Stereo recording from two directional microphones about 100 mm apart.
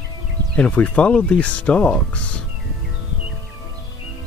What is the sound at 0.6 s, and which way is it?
Speech, 10° left (ahead or behind).